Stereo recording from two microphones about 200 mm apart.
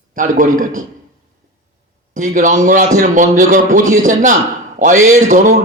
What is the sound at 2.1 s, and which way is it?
A man's voice, 40° right (ahead or behind).